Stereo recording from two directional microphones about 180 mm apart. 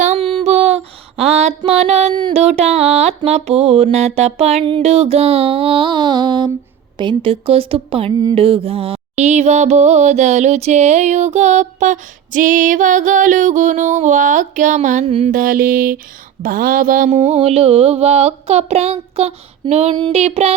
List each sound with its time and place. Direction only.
0.0 s a sound: 40° right (ahead or behind)
0.3 s mantra: 35° right (ahead or behind)
15.3 s mantra: 50° right (ahead or behind)
17.1 s mantra: 35° right (ahead or behind)